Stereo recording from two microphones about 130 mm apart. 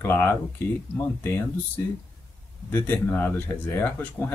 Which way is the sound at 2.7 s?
15° left (ahead or behind).